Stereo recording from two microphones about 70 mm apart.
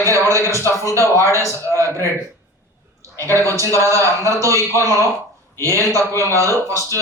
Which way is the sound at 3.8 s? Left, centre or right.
Right.